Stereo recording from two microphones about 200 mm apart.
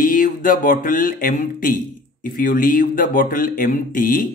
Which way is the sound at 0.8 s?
45° left (ahead or behind).